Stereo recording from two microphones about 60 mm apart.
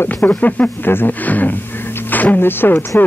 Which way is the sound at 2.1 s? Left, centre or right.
Left.